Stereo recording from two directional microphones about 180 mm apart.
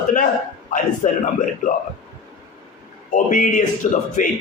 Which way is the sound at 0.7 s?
45° left (ahead or behind).